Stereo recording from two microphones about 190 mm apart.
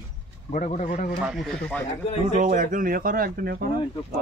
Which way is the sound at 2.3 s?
40° right (ahead or behind).